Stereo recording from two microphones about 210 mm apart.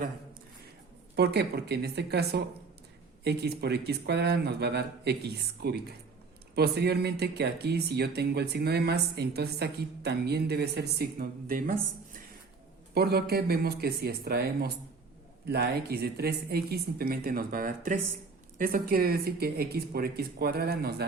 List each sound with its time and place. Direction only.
1.1 s speech: 50° right (ahead or behind)